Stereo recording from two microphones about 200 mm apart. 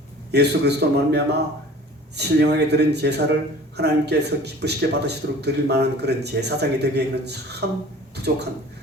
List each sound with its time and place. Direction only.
0.3 s a man's voice: 55° right (ahead or behind)